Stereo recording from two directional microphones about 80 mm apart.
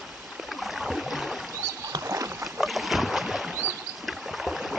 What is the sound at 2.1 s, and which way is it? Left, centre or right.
Boat, right.